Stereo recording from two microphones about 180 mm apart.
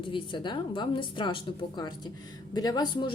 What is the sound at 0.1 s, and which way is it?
A woman's voice, 25° left (ahead or behind).